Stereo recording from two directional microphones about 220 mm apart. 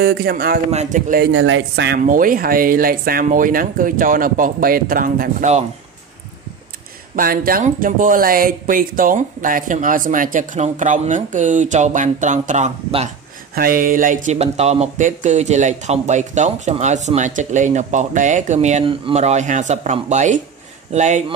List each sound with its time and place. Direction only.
0.0 s speech: 45° right (ahead or behind)
1.3 s speech: 60° right (ahead or behind)
2.0 s speech: 40° right (ahead or behind)
7.2 s speech: 40° right (ahead or behind)